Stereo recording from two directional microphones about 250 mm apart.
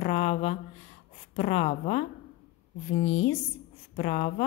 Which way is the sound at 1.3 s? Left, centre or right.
Left.